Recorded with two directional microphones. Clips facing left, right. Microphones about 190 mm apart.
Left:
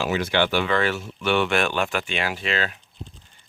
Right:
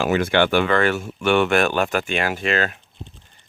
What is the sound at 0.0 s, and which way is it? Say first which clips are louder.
Speech: right 4 dB; 50° right (ahead or behind).